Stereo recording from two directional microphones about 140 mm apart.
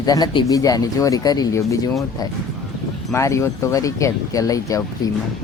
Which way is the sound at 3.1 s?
20° left (ahead or behind).